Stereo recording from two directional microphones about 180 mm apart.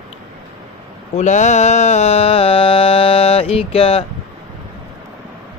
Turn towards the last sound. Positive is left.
turn(degrees=30)  # may be behind; listen again after turning